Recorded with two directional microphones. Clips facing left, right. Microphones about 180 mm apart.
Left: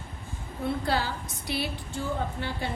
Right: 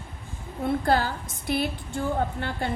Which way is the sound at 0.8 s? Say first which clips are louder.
Right 5 dB; 50° right (ahead or behind).